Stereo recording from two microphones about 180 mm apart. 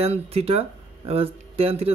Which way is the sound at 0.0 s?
35° right (ahead or behind).